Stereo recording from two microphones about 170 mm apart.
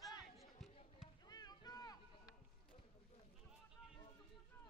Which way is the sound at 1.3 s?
25° left (ahead or behind).